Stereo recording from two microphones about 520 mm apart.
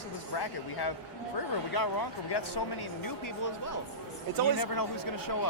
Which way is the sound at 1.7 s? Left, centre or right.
Left.